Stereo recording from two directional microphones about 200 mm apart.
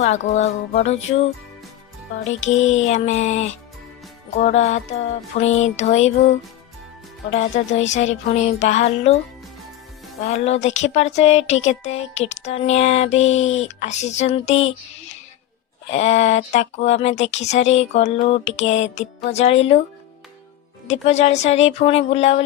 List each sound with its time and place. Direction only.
0.0 s speech: 35° left (ahead or behind)
2.4 s music: 75° left (ahead or behind)
2.8 s speech: 35° left (ahead or behind)
7.3 s speech: 35° left (ahead or behind)
10.2 s speech: 30° left (ahead or behind)
20.8 s speech: 35° left (ahead or behind)